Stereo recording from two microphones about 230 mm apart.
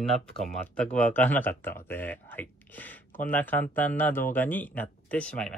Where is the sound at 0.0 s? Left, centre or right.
Centre.